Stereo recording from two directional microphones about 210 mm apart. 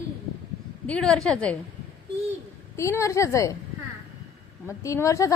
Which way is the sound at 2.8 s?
15° left (ahead or behind).